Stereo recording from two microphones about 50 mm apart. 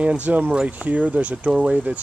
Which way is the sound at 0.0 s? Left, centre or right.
Right.